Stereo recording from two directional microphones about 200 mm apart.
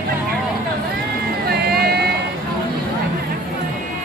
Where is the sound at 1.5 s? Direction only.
55° right (ahead or behind).